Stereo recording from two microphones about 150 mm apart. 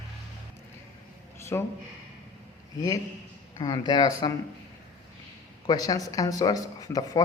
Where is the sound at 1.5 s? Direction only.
20° left (ahead or behind).